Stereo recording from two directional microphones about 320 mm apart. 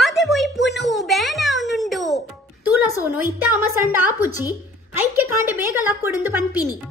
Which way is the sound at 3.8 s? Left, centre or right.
Centre.